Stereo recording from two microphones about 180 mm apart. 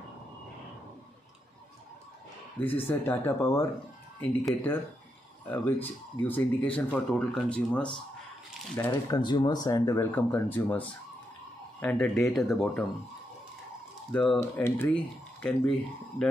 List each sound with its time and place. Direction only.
2.6 s speech: 10° left (ahead or behind)
8.7 s speech: 15° left (ahead or behind); by 12.8 s centre (ahead or behind)
14.1 s speech: 5° left (ahead or behind)